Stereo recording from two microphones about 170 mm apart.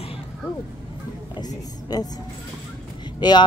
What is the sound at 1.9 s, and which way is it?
Speech, 25° left (ahead or behind).